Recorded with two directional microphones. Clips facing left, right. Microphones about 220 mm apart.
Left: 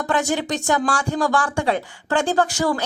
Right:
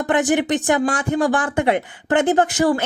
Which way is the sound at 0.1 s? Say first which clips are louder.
Right 5 dB; 20° right (ahead or behind).